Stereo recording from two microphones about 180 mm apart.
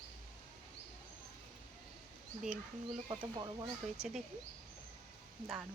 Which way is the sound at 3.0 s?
25° right (ahead or behind).